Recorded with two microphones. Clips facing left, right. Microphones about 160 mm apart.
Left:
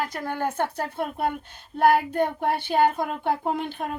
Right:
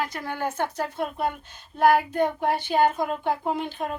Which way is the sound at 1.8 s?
60° left (ahead or behind).